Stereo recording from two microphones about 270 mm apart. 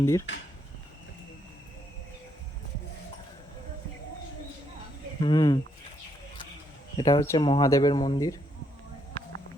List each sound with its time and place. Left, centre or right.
0.0 s speech: centre
5.2 s speech: centre
6.9 s speech: centre